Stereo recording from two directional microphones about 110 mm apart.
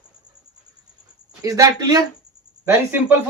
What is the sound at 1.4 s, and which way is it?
Speech, 30° right (ahead or behind).